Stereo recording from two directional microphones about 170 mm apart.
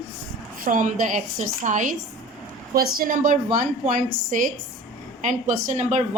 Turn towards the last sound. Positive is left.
turn(degrees=-45)  # may be behind; listen again after turning